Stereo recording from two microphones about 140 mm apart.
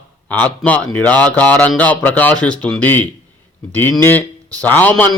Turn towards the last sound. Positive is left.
turn(degrees=15)  # may be behind; listen again after turning